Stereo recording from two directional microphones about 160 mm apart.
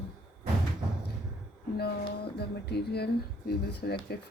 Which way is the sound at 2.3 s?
90° left.